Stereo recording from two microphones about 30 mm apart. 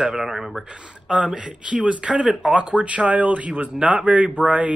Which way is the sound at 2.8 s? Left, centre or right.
Right.